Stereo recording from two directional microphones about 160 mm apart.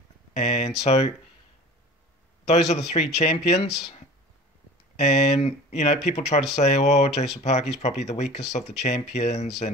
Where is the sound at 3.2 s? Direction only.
40° left (ahead or behind).